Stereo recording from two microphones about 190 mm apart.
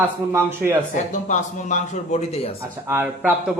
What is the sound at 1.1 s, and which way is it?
Speech, 40° left (ahead or behind).